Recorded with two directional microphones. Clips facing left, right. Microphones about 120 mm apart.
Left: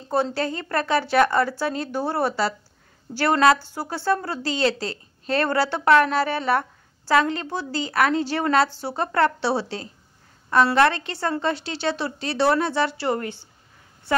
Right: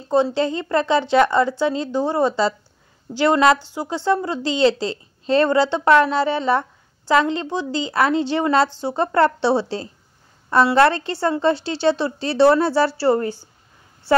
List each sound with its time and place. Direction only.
0.1 s a woman's voice: 20° right (ahead or behind)